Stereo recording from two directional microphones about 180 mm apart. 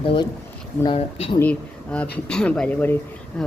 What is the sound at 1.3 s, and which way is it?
Speech, 10° left (ahead or behind).